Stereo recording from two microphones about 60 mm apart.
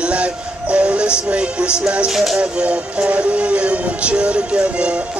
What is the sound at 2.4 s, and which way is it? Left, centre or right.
Music, right.